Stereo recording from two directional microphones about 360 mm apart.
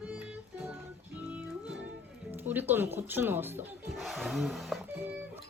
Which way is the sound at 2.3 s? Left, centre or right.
Centre.